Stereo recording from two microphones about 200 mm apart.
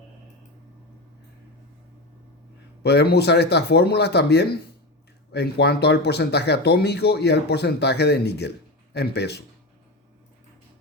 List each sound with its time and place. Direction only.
2.8 s speech: 55° left (ahead or behind)